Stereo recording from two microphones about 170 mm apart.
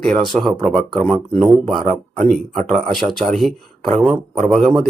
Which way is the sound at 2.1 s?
5° left (ahead or behind).